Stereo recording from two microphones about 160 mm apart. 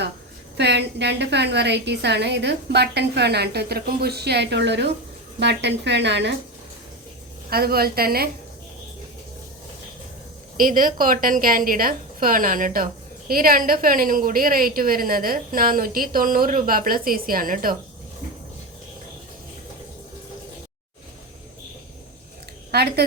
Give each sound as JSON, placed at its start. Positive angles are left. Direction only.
{"t": 0.5, "sound": "a woman's voice", "side_deg": -90}
{"t": 7.5, "sound": "a woman's voice", "side_deg": -70}
{"t": 10.6, "sound": "a woman's voice", "side_deg": -60}
{"t": 22.7, "sound": "speech", "side_deg": -90}